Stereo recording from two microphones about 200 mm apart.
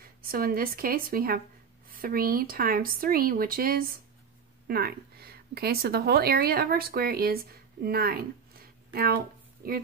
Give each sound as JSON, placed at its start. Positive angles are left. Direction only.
{"t": 0.0, "sound": "a woman's voice", "side_deg": -45}